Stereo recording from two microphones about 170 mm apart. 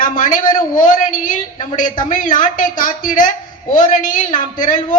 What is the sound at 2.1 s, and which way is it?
Speech, 50° left (ahead or behind).